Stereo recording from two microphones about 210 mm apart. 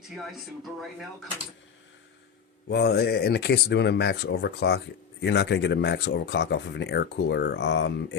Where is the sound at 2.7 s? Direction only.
50° left (ahead or behind).